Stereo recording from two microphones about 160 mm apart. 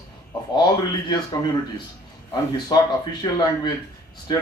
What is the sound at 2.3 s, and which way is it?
Speech, 25° left (ahead or behind).